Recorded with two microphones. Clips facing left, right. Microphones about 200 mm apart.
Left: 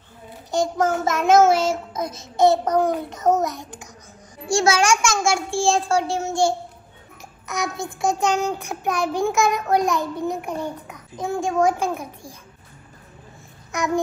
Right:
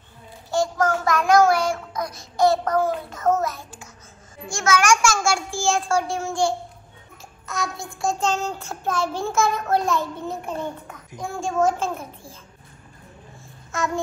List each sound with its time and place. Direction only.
0.5 s a child's voice: 20° left (ahead or behind)
4.5 s a child's voice: 30° left (ahead or behind)
7.4 s a child's voice: 20° left (ahead or behind)
8.0 s child singing: 15° left (ahead or behind)
13.7 s babbling: 15° left (ahead or behind)